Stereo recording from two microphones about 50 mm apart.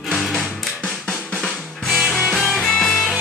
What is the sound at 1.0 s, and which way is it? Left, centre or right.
Drum, centre.